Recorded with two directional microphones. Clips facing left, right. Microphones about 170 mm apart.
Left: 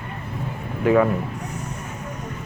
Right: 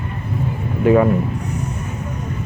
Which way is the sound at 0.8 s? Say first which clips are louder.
Right 4 dB; 25° right (ahead or behind).